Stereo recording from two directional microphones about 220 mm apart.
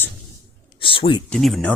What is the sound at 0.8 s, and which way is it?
Speech, 25° left (ahead or behind).